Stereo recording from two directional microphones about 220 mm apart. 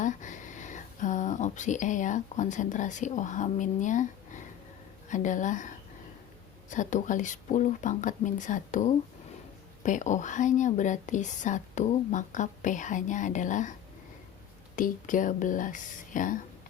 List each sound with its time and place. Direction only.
0.0 s speech: 35° left (ahead or behind)
14.8 s speech: 35° left (ahead or behind)